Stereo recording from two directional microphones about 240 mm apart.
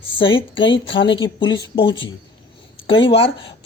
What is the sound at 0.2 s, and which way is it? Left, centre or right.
Speech, left.